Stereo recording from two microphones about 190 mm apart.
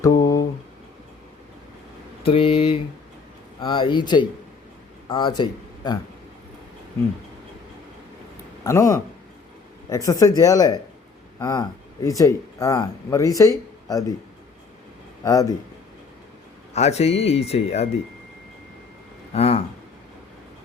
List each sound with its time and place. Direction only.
0.0 s a sound: 20° left (ahead or behind)
2.2 s a man's voice: 30° left (ahead or behind)
8.6 s speech: 15° left (ahead or behind)
15.2 s a man's voice: 20° left (ahead or behind)
16.7 s speech: 35° left (ahead or behind)
19.3 s speech: 30° left (ahead or behind)